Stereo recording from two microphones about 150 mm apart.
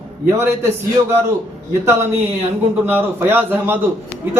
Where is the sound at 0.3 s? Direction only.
20° right (ahead or behind).